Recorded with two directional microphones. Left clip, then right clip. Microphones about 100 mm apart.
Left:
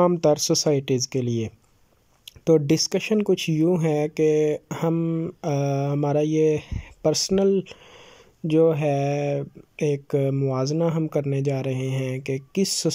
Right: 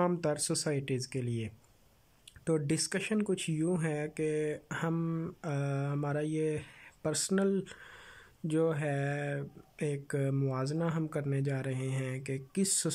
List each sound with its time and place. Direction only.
0.0 s speech: 40° left (ahead or behind)
5.0 s speech: 20° left (ahead or behind)
5.4 s speech: 35° left (ahead or behind)